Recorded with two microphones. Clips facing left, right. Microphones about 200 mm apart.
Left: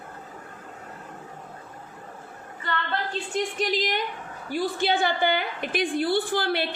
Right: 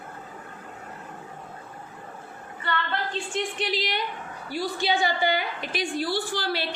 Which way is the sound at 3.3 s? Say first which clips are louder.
Left 3 dB; 40° left (ahead or behind).